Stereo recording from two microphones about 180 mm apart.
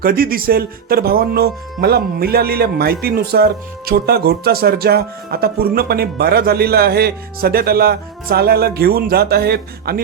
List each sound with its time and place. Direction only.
0.0 s speech: 55° right (ahead or behind)